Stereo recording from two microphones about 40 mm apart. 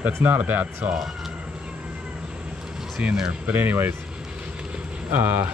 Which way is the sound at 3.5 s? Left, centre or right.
Right.